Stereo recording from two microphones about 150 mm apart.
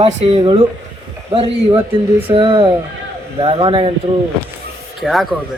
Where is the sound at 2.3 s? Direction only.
35° right (ahead or behind).